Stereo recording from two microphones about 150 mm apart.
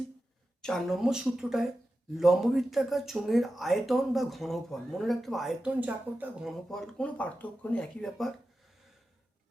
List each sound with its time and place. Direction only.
0.6 s speech: centre (ahead or behind)
6.7 s speech: 5° left (ahead or behind)